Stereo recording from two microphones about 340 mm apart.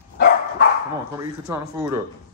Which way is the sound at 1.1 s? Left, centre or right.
Centre.